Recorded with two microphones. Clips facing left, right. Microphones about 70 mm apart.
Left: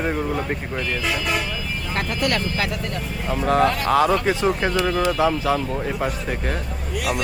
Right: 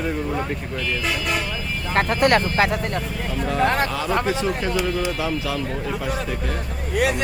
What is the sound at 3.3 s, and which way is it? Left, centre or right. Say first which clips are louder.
Speech: left 4 dB; left.